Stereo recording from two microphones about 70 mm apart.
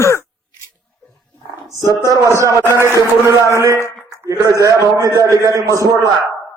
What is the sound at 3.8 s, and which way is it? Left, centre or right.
A man's voice, right.